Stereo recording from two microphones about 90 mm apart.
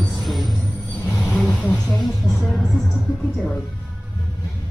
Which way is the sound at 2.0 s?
Centre (ahead or behind).